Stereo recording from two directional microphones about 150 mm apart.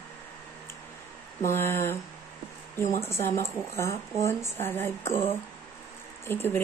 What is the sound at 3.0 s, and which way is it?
Speech, 20° left (ahead or behind).